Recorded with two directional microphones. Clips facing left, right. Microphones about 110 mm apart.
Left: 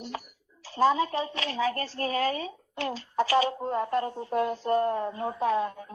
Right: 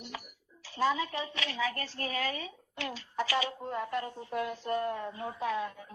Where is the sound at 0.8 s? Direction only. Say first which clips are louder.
Left 6 dB; 35° left (ahead or behind).